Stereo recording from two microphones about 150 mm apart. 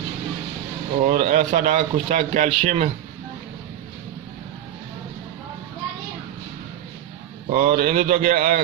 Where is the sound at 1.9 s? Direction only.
45° right (ahead or behind).